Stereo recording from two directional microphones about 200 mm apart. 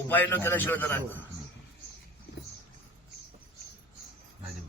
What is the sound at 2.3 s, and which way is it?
Vehicle, 60° left (ahead or behind).